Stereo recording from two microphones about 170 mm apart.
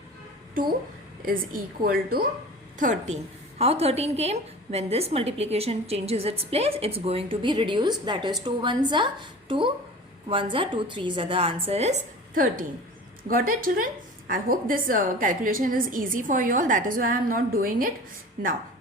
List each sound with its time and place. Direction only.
1.2 s a woman's voice: 55° right (ahead or behind)
2.7 s a woman's voice: 45° right (ahead or behind)
3.6 s a woman's voice: 35° right (ahead or behind); by 17.9 s 55° right (ahead or behind)